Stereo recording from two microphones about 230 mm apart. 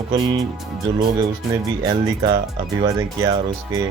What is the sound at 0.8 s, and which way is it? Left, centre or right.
Speech, centre.